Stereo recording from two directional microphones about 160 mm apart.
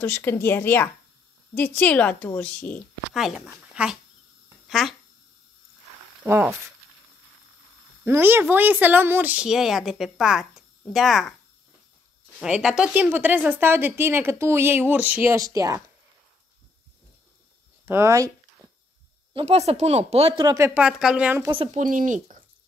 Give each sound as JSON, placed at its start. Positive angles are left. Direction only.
{"t": 0.0, "sound": "a woman's voice", "side_deg": 15}
{"t": 3.2, "sound": "speech", "side_deg": 0}
{"t": 8.0, "sound": "a woman's voice", "side_deg": -15}
{"t": 12.4, "sound": "a woman's voice", "side_deg": -5}
{"t": 17.8, "sound": "a woman's voice", "side_deg": -15}
{"t": 19.3, "sound": "speech", "side_deg": -40}
{"t": 21.4, "sound": "speech", "side_deg": -30}
{"t": 21.7, "sound": "speech", "side_deg": -55}